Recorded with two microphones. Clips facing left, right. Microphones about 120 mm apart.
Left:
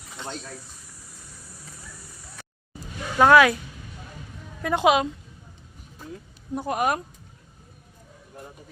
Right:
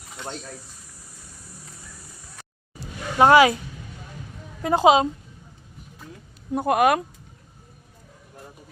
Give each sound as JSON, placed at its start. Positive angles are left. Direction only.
{"t": 3.2, "sound": "a woman's voice", "side_deg": -25}
{"t": 4.6, "sound": "a woman's voice", "side_deg": -30}
{"t": 6.5, "sound": "speech", "side_deg": -65}